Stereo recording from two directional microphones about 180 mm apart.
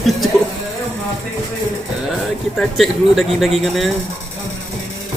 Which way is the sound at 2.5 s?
Centre (ahead or behind).